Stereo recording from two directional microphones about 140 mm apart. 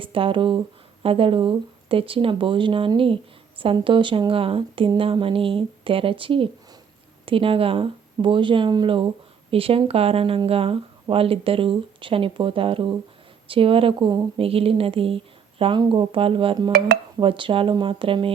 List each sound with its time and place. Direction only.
0.0 s a woman's voice: 40° right (ahead or behind)